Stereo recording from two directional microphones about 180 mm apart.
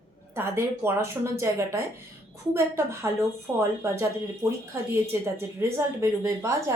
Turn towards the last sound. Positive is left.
turn(degrees=-15)  # may be behind; listen again after turning